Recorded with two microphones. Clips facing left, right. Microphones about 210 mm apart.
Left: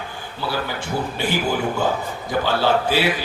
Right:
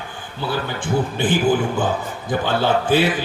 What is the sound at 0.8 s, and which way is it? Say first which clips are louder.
A man's voice: right 4 dB; 50° right (ahead or behind).